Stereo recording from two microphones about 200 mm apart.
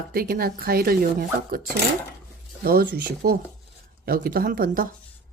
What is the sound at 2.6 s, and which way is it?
Speech, 50° right (ahead or behind).